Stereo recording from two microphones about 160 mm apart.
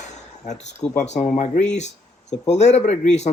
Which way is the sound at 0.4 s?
45° left (ahead or behind).